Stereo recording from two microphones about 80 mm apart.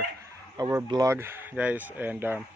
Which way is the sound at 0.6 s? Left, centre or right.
Right.